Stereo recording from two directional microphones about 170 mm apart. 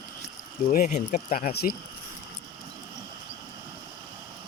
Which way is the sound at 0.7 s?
50° left (ahead or behind).